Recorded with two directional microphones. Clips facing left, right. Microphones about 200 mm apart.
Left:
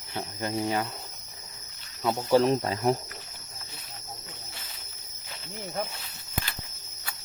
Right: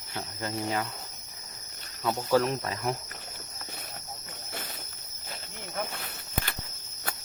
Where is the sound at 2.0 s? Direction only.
15° left (ahead or behind).